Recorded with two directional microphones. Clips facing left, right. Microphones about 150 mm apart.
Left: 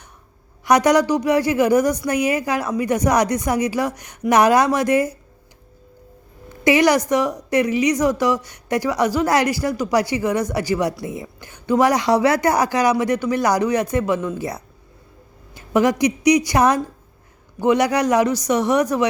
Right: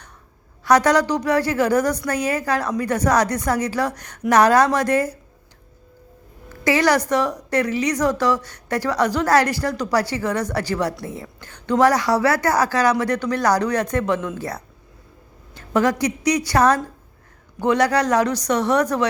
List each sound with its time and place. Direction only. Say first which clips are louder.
0.6 s a woman's voice: left 1 dB; 15° left (ahead or behind)
6.5 s a woman's voice: left 2 dB; 15° left (ahead or behind)